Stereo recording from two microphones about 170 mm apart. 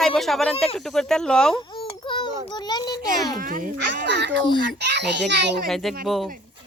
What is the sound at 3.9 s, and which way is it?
A child's voice, 90° right.